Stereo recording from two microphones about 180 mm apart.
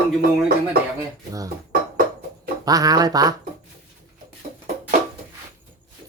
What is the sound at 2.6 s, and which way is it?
Speech, 20° right (ahead or behind).